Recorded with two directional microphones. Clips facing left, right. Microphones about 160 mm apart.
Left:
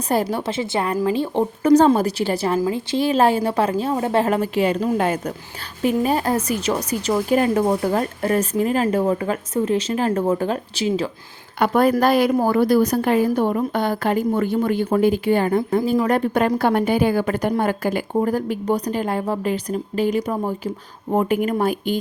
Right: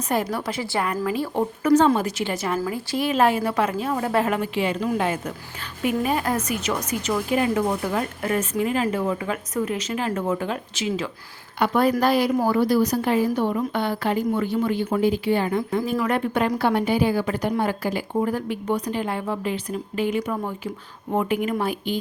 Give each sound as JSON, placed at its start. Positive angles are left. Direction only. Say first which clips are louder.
{"t": 0.1, "sound": "a woman's voice", "louder": "left 4 dB", "side_deg": 30}
{"t": 2.0, "sound": "a woman's voice", "louder": "left 5 dB", "side_deg": 35}
{"t": 9.6, "sound": "speech", "louder": "left 6 dB", "side_deg": 30}
{"t": 11.6, "sound": "a woman's voice", "louder": "left 3 dB", "side_deg": 50}
{"t": 15.9, "sound": "a woman's voice", "louder": "left 5 dB", "side_deg": 35}